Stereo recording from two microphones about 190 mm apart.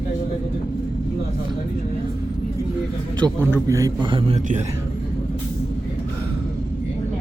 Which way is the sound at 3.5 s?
15° right (ahead or behind).